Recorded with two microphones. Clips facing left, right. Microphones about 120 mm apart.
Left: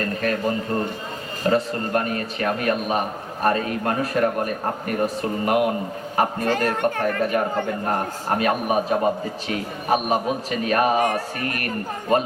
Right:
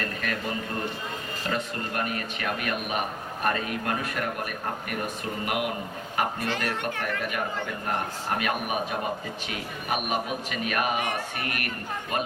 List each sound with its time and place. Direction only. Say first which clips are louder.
0.2 s a man's voice: left 8 dB; 35° left (ahead or behind)
8.4 s a man's voice: left 8 dB; 35° left (ahead or behind)